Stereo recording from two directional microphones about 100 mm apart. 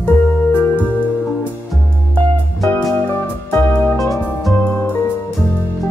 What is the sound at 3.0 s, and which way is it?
Music, 20° left (ahead or behind).